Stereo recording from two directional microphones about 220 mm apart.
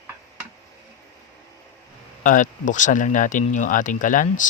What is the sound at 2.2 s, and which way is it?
Speech, 35° left (ahead or behind).